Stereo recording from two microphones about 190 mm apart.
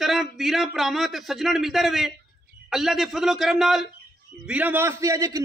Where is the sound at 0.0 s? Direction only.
Centre (ahead or behind).